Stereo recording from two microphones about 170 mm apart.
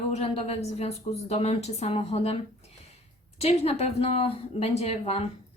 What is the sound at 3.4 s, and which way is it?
A woman's voice, 40° left (ahead or behind).